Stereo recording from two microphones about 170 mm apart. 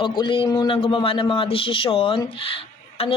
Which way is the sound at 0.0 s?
30° left (ahead or behind).